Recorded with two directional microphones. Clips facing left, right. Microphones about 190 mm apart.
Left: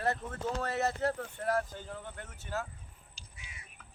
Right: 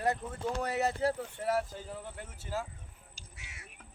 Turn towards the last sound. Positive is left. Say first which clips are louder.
# right 1 dB
turn(degrees=-75)  # may be behind; listen again after turning